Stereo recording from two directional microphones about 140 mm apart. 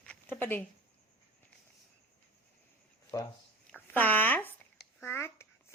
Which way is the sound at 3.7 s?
10° left (ahead or behind).